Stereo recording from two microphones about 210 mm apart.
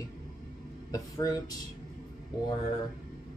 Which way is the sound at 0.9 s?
15° left (ahead or behind).